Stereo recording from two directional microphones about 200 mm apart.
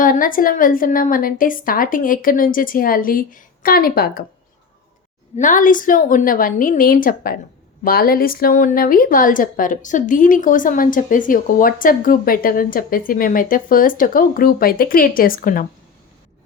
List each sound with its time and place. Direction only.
0.0 s a woman's voice: 45° left (ahead or behind)
5.4 s a woman's voice: 40° left (ahead or behind)